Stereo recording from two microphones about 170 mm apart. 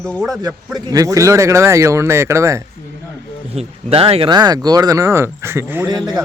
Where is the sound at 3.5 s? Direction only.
35° right (ahead or behind); by 5.8 s 15° right (ahead or behind).